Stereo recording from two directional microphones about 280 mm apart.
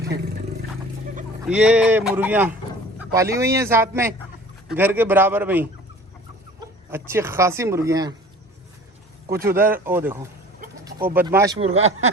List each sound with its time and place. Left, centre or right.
1.5 s speech: centre
6.9 s speech: centre
9.4 s speech: centre
11.6 s speech: right